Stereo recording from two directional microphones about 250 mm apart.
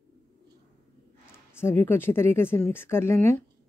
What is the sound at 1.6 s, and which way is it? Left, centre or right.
Speech, centre.